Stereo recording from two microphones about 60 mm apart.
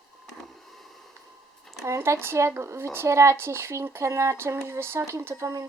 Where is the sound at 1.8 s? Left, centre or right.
Right.